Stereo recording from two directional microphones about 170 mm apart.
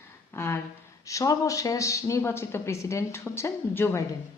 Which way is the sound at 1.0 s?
20° left (ahead or behind).